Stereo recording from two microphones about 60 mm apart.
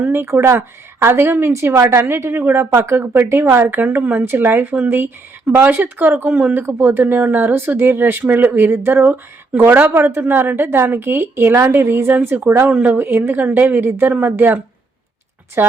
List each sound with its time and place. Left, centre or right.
0.0 s a woman's voice: right